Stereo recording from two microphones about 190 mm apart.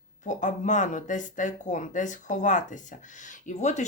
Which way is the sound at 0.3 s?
40° left (ahead or behind).